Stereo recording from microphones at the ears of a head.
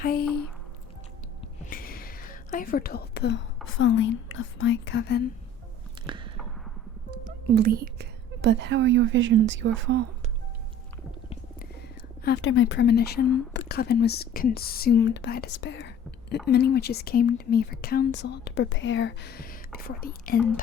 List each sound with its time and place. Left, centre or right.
0.0 s speech: left
1.7 s whispering: left
3.7 s speech: left
7.1 s a woman's voice: right
12.2 s speech: left